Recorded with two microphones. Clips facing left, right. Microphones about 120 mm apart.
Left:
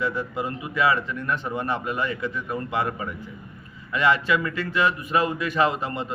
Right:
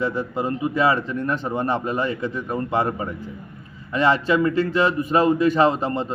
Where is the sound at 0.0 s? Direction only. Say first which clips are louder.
Right 3 dB; 30° right (ahead or behind).